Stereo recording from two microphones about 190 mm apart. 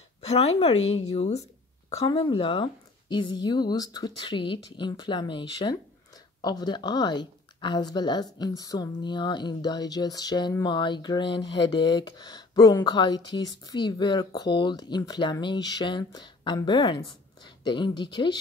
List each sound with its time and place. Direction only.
0.2 s speech: 35° left (ahead or behind)
2.0 s speech: 25° left (ahead or behind)